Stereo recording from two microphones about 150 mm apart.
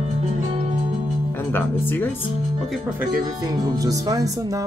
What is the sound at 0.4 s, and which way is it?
Music, 50° right (ahead or behind).